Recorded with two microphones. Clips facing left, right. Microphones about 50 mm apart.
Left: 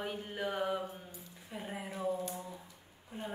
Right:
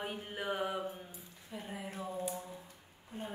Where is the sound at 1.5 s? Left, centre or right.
Centre.